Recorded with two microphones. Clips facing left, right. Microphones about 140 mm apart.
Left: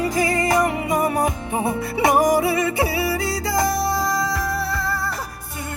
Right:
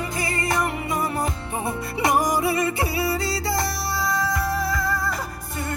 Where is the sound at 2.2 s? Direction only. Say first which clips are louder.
Left 7 dB; 55° left (ahead or behind).